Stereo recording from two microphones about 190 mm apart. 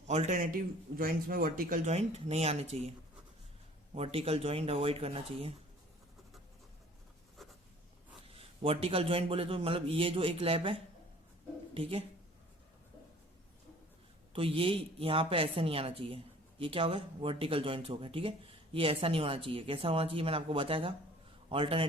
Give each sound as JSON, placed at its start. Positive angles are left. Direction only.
{"t": 0.1, "sound": "a man's voice", "side_deg": -35}
{"t": 3.9, "sound": "a man's voice", "side_deg": -30}
{"t": 8.3, "sound": "a woman's voice", "side_deg": -30}
{"t": 14.3, "sound": "a woman's voice", "side_deg": -30}